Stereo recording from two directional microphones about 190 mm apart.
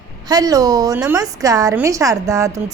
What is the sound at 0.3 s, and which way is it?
Speech, 20° right (ahead or behind).